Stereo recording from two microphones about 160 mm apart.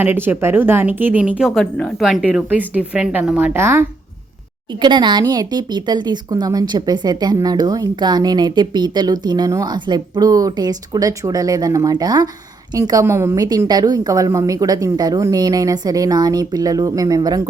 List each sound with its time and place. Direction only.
0.0 s speech: 15° right (ahead or behind)
4.7 s speech: 30° right (ahead or behind)